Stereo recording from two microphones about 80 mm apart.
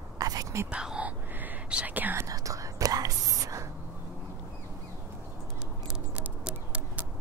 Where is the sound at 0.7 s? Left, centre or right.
Centre.